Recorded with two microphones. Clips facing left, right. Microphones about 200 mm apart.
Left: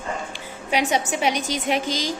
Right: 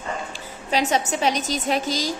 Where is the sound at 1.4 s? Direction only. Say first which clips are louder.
Even; 15° left (ahead or behind).